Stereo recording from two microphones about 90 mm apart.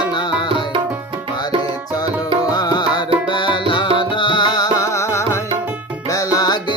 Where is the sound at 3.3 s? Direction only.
65° left (ahead or behind).